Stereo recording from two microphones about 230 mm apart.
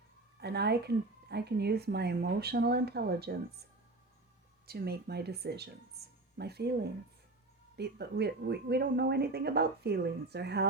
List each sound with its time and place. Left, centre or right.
0.3 s a woman's voice: right
4.6 s a woman's voice: right
7.8 s a woman's voice: right